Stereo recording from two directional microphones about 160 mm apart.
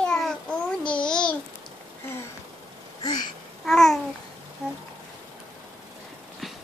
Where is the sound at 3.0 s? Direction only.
25° left (ahead or behind).